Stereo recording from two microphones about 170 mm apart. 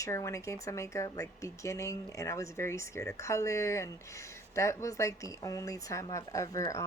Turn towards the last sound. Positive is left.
turn(degrees=20)  # may be behind; listen again after turning